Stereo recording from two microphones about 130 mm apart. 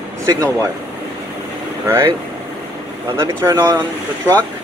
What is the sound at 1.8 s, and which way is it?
Speech, 20° right (ahead or behind).